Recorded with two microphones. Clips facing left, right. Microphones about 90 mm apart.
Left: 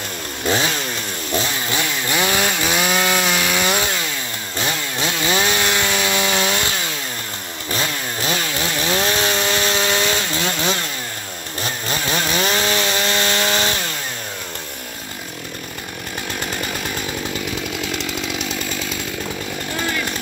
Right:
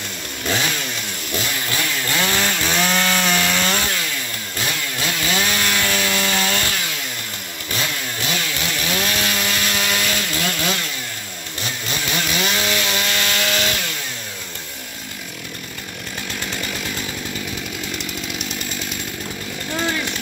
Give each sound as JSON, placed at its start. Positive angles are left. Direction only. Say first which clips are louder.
{"t": 0.5, "sound": "chainsaw", "louder": "left 3 dB", "side_deg": 30}
{"t": 4.6, "sound": "chainsaw", "louder": "left 2 dB", "side_deg": 25}
{"t": 7.7, "sound": "chainsaw", "louder": "left 2 dB", "side_deg": 30}